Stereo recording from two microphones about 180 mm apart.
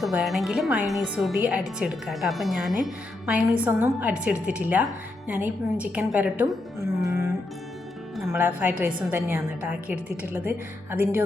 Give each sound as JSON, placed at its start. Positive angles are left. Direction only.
{"t": 0.0, "sound": "a woman's voice", "side_deg": 0}
{"t": 7.0, "sound": "music", "side_deg": -20}
{"t": 8.3, "sound": "a woman's voice", "side_deg": -10}